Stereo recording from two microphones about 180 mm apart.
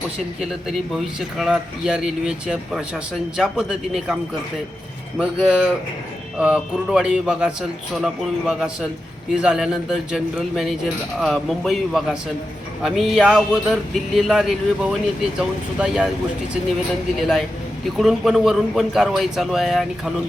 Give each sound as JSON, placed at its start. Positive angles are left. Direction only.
{"t": 0.9, "sound": "speech", "side_deg": -5}
{"t": 17.2, "sound": "speech", "side_deg": 0}